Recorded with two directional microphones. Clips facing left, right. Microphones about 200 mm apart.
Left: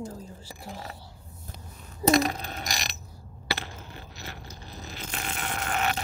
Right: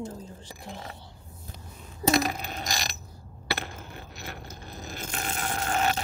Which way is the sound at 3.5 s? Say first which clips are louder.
Right 1 dB; 55° right (ahead or behind).